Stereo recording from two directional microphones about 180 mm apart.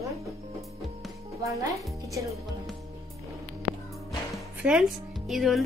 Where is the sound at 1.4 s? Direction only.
15° right (ahead or behind).